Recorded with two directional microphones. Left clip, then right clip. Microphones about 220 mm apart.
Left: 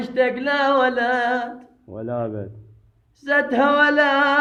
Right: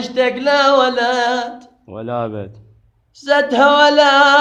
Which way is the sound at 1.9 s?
20° right (ahead or behind).